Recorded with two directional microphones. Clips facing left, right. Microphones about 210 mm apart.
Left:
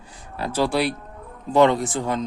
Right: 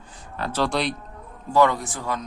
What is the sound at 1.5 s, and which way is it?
Speech, 25° left (ahead or behind).